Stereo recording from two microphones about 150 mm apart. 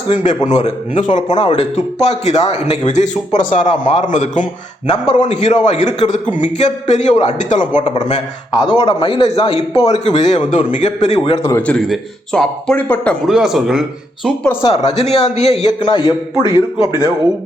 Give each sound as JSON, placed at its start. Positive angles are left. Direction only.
{"t": 0.4, "sound": "a man's voice", "side_deg": 55}
{"t": 1.3, "sound": "a man's voice", "side_deg": 35}
{"t": 8.6, "sound": "a man's voice", "side_deg": 30}
{"t": 11.4, "sound": "a man's voice", "side_deg": 15}
{"t": 11.9, "sound": "speech", "side_deg": 5}
{"t": 13.2, "sound": "speech", "side_deg": -5}
{"t": 14.6, "sound": "a man's voice", "side_deg": 45}